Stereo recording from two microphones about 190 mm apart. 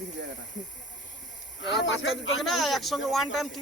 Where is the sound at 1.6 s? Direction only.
85° left.